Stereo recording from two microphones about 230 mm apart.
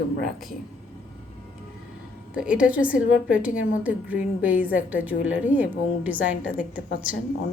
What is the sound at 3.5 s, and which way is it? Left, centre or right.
Speech, left.